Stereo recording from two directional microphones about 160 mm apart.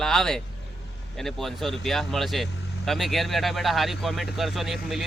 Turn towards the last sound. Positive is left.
turn(degrees=0)  # may be behind; listen again after turning